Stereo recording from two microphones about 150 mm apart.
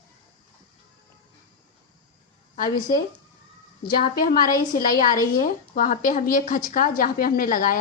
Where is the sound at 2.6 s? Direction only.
70° left (ahead or behind).